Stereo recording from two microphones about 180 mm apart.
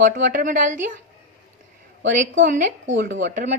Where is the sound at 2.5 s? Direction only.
45° right (ahead or behind).